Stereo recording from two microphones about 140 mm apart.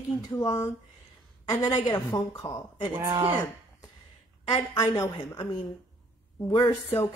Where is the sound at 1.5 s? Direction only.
30° left (ahead or behind).